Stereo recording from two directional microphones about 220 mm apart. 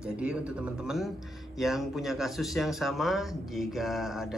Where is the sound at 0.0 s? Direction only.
5° right (ahead or behind).